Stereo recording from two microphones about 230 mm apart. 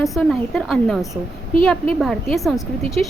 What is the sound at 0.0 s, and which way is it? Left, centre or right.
Speech, centre.